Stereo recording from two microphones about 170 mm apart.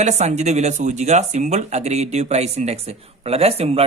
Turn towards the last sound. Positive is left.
turn(degrees=-35)  # may be behind; listen again after turning